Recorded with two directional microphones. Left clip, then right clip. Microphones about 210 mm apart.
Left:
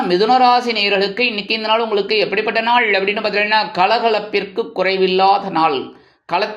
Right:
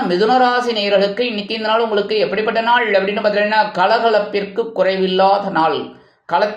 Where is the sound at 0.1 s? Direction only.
20° left (ahead or behind).